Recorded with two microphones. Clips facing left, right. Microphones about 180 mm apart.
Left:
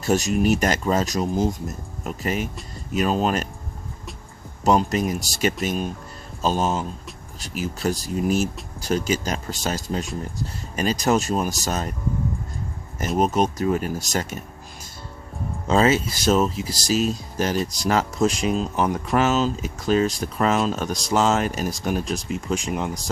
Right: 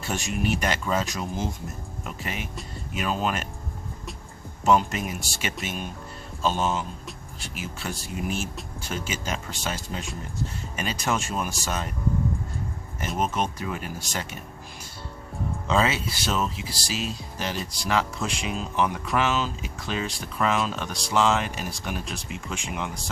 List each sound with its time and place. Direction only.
0.0 s speech: 40° left (ahead or behind)
4.6 s speech: 35° left (ahead or behind)
13.1 s speech: 40° left (ahead or behind)
15.6 s speech: 45° left (ahead or behind)